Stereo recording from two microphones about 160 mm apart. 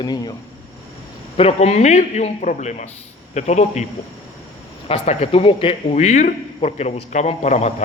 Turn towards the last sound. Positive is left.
turn(degrees=45)  # may be behind; listen again after turning